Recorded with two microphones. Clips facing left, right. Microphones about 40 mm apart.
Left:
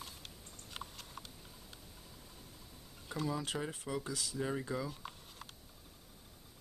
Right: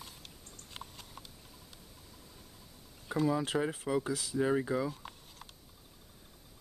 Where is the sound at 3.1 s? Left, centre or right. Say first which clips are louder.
Right 7 dB; centre.